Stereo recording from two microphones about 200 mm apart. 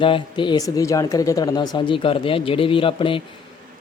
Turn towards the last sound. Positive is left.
turn(degrees=25)  # may be behind; listen again after turning